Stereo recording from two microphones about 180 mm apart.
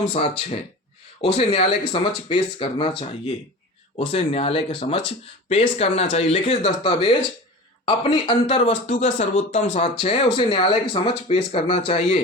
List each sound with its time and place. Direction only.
0.0 s speech: 35° left (ahead or behind)
4.1 s speech: 35° left (ahead or behind)